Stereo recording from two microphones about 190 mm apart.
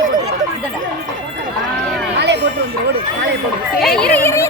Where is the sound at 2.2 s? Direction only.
65° right (ahead or behind).